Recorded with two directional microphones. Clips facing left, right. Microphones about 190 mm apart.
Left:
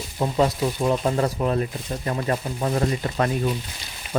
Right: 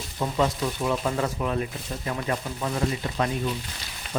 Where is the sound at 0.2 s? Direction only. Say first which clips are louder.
Left 4 dB; 35° left (ahead or behind).